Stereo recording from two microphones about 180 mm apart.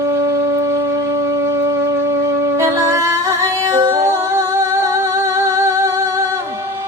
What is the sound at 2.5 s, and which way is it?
Music, 15° right (ahead or behind).